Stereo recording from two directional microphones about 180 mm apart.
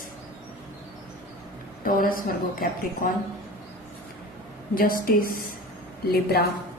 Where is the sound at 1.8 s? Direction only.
50° left (ahead or behind).